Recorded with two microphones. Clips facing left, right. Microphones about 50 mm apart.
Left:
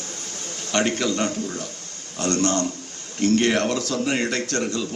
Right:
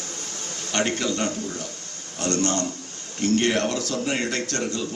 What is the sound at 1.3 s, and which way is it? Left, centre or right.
A man's voice, left.